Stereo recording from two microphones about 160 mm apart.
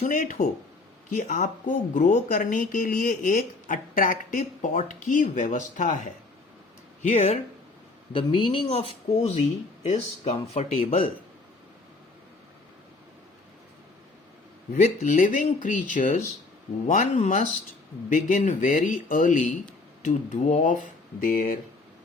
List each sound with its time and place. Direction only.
0.0 s speech: 55° left (ahead or behind)
8.1 s speech: 30° left (ahead or behind)
14.8 s speech: 50° left (ahead or behind)